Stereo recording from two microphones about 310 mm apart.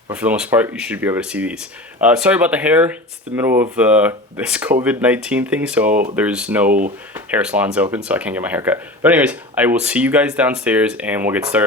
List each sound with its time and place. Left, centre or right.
0.1 s speech: centre
5.9 s speech: right
6.1 s speech: centre
6.7 s speech: right
7.3 s speech: centre